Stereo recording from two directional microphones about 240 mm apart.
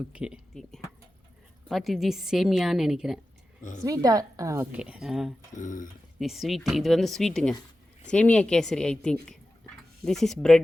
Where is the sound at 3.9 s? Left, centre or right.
Centre.